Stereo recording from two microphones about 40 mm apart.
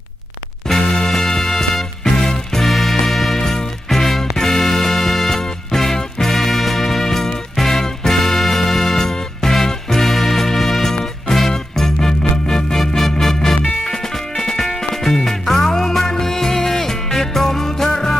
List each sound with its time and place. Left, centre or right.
0.7 s music: centre
2.6 s music: centre